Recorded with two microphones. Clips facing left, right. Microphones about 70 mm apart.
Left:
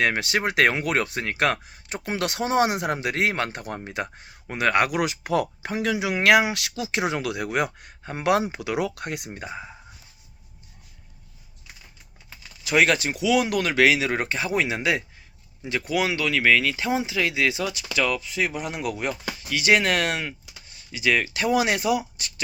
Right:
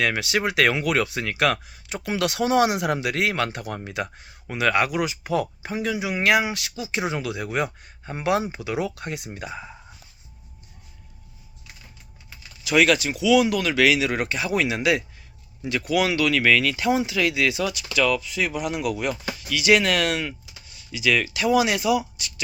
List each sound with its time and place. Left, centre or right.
0.0 s speech: left
9.5 s speech: centre
12.6 s speech: left